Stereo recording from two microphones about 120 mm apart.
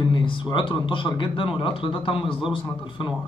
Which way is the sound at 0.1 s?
45° left (ahead or behind).